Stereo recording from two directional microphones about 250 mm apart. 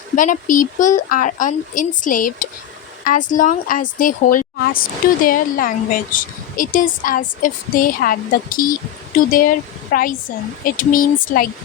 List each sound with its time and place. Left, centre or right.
0.2 s speech: left